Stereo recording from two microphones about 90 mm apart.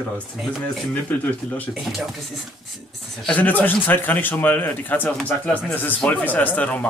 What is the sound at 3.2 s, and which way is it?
A man's voice, 15° left (ahead or behind).